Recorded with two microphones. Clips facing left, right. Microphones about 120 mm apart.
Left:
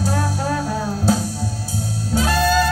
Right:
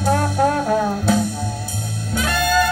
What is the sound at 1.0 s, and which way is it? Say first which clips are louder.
Music: right 1 dB; 35° left (ahead or behind).